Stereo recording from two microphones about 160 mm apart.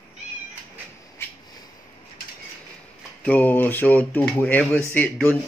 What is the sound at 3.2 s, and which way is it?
Speech, 10° left (ahead or behind).